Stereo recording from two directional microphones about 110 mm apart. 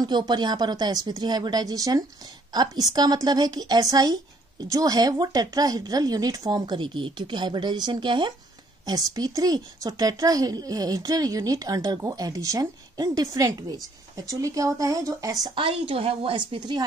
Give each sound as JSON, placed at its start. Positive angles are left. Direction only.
{"t": 0.0, "sound": "speech", "side_deg": -40}
{"t": 6.6, "sound": "speech", "side_deg": -50}
{"t": 8.8, "sound": "speech", "side_deg": -35}
{"t": 15.5, "sound": "a woman's voice", "side_deg": -55}